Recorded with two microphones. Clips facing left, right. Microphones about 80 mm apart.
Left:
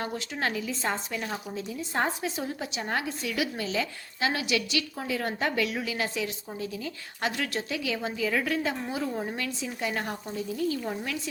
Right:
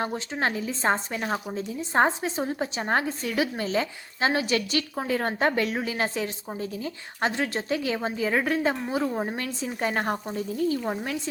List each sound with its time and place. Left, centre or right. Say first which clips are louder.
0.0 s a woman's voice: right 4 dB; right